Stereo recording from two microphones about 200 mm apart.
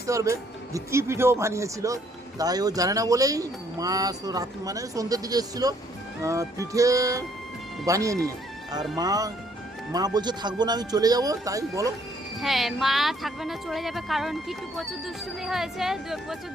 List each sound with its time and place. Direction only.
0.1 s speech: 15° right (ahead or behind)
12.4 s speech: centre (ahead or behind)